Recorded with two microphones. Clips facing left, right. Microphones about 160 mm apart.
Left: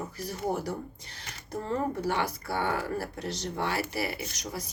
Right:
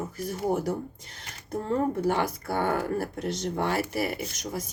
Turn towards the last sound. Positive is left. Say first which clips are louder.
# right 3 dB
turn(degrees=-45)  # may be behind; listen again after turning